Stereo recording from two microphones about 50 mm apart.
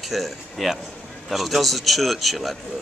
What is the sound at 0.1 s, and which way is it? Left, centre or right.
Speech, centre.